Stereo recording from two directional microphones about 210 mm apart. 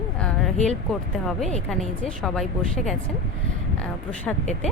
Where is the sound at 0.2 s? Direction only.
5° left (ahead or behind).